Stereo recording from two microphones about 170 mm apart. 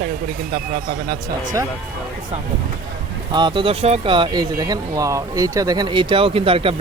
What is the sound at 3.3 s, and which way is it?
Speech, 25° right (ahead or behind).